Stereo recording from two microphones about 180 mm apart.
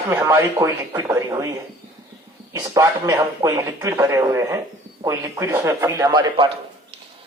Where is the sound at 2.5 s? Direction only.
20° right (ahead or behind).